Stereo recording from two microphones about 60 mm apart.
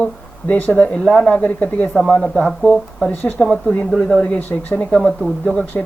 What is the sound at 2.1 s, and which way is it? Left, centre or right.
Speech, centre.